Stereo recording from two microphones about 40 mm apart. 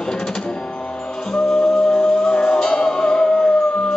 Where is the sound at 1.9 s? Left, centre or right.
Left.